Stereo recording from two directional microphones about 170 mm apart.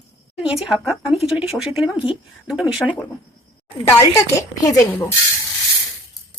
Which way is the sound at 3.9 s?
20° left (ahead or behind).